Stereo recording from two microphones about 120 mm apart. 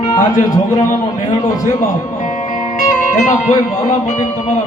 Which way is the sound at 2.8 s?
85° left.